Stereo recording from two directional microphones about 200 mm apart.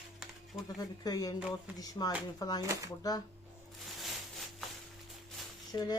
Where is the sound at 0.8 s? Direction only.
20° left (ahead or behind).